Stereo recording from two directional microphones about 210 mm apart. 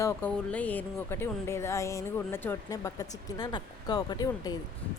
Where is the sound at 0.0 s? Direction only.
10° left (ahead or behind).